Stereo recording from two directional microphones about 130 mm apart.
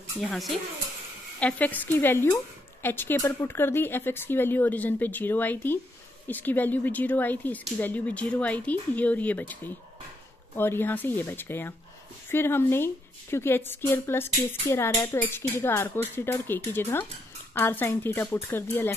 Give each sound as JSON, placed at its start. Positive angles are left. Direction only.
{"t": 0.2, "sound": "speech", "side_deg": 0}
{"t": 1.4, "sound": "speech", "side_deg": 10}